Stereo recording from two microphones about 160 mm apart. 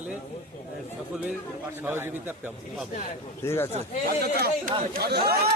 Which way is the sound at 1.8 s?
15° right (ahead or behind).